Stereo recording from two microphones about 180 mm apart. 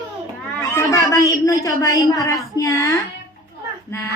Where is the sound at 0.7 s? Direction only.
15° left (ahead or behind).